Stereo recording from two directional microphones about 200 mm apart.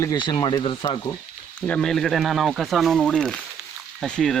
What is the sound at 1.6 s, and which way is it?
Speech, 5° left (ahead or behind).